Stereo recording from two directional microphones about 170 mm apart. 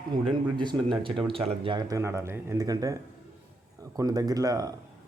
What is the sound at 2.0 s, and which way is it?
Speech, 15° right (ahead or behind).